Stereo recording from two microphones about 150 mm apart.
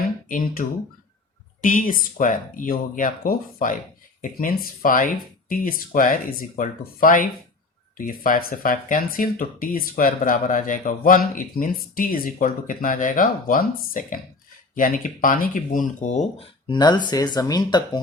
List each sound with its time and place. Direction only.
0.3 s speech: 65° left (ahead or behind)
1.6 s speech: 65° left (ahead or behind)
16.6 s speech: 30° left (ahead or behind)